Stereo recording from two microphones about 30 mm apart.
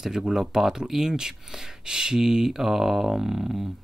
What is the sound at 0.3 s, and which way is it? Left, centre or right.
Speech, centre.